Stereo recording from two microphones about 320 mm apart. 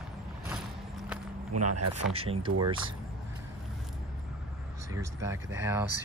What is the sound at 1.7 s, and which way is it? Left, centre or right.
Speech, right.